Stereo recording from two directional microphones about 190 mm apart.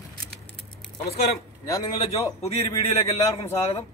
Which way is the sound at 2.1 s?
35° left (ahead or behind).